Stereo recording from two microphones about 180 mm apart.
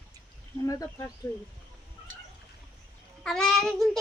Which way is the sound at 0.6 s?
20° left (ahead or behind).